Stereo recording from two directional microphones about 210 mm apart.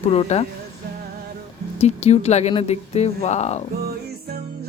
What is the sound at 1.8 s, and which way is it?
Speech, 30° left (ahead or behind).